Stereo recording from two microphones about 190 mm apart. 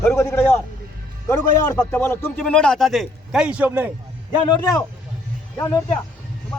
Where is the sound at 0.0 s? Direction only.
15° left (ahead or behind); by 4.4 s 10° right (ahead or behind).